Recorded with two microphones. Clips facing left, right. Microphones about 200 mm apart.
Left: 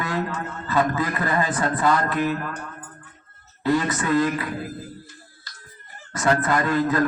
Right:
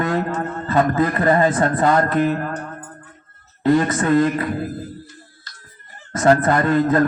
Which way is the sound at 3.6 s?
50° right (ahead or behind).